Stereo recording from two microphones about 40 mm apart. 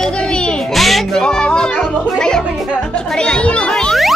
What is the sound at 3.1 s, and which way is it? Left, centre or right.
Music, left.